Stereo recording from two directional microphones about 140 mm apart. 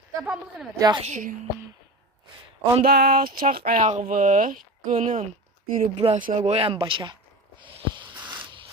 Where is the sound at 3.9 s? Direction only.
65° right (ahead or behind).